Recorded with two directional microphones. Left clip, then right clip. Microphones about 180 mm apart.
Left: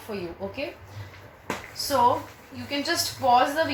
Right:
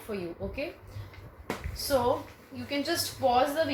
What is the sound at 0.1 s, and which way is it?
Speech, 20° right (ahead or behind).